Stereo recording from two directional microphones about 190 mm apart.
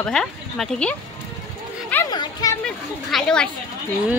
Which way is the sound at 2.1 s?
20° left (ahead or behind).